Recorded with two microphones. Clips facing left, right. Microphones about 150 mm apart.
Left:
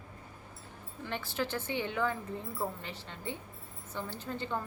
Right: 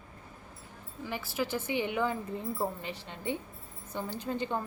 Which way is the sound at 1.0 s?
10° right (ahead or behind).